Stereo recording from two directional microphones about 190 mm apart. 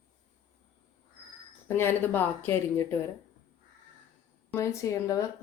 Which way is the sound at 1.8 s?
10° left (ahead or behind).